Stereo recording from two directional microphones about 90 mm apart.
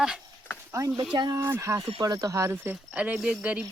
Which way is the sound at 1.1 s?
55° right (ahead or behind).